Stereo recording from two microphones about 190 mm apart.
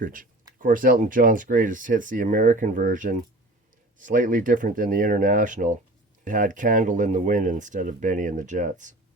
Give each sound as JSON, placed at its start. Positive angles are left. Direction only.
{"t": 0.0, "sound": "speech", "side_deg": -45}